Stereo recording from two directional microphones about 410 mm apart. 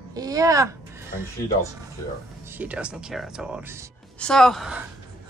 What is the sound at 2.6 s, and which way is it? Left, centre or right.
Speech, centre.